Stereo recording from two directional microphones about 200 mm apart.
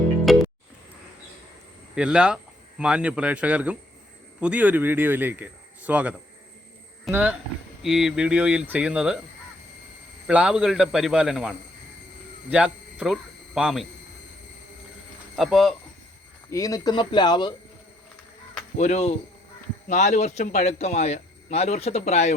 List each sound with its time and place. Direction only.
0.3 s music: centre (ahead or behind)
2.0 s speech: 5° right (ahead or behind)
10.2 s speech: 5° right (ahead or behind)
15.4 s speech: centre (ahead or behind)
16.5 s speech: 15° left (ahead or behind)
18.8 s speech: 35° left (ahead or behind)